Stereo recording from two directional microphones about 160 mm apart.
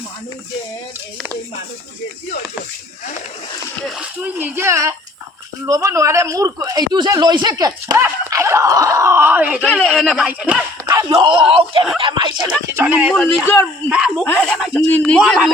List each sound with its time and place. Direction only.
3.8 s a man's voice: 5° right (ahead or behind)
9.6 s speech: 5° left (ahead or behind)
11.1 s a man's voice: 30° right (ahead or behind)
12.7 s speech: 10° right (ahead or behind)
14.3 s speech: 10° left (ahead or behind)
14.5 s speech: 5° right (ahead or behind)
14.8 s speech: 10° left (ahead or behind)
15.2 s speech: centre (ahead or behind)